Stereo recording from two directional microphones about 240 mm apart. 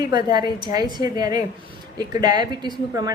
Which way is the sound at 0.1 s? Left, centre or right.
Centre.